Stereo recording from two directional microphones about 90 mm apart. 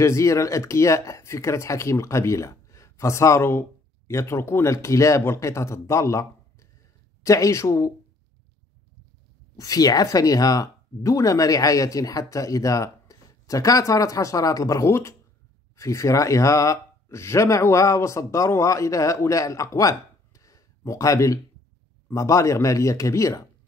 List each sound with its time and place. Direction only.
0.0 s speech: 35° left (ahead or behind)
9.6 s speech: 40° left (ahead or behind)